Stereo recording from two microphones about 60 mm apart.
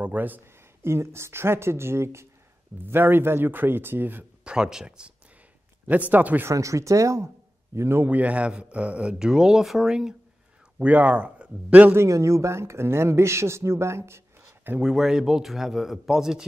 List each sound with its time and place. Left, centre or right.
0.0 s speech: right
0.8 s speech: right
2.9 s speech: right
4.5 s a man's voice: centre
5.9 s speech: right
6.5 s speech: right
7.7 s a man's voice: right
8.0 s a man's voice: right; by 9.9 s centre
10.8 s speech: right
12.1 s speech: right
14.8 s a man's voice: centre